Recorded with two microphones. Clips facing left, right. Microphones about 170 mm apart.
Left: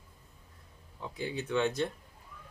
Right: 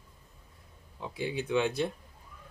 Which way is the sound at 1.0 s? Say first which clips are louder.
Right 3 dB; 15° right (ahead or behind).